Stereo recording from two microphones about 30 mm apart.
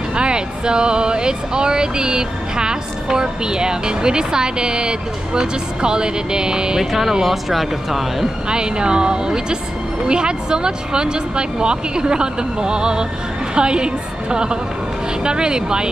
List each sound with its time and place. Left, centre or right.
0.1 s speech: right
6.8 s speech: centre
8.5 s speech: right